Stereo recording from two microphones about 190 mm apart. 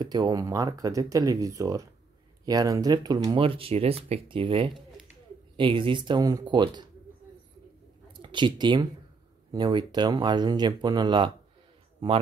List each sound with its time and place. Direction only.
0.0 s speech: 20° right (ahead or behind)
8.1 s speech: 25° right (ahead or behind)